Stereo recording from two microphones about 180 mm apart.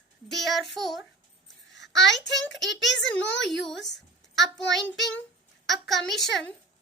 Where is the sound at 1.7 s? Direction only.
80° left.